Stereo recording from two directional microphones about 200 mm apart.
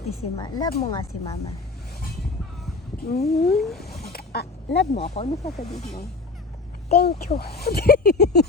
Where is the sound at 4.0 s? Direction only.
55° left (ahead or behind).